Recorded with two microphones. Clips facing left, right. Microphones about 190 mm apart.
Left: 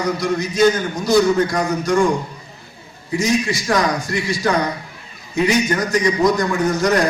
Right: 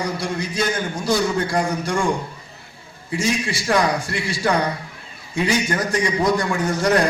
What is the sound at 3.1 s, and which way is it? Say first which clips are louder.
A man's voice: left 4 dB; 30° right (ahead or behind).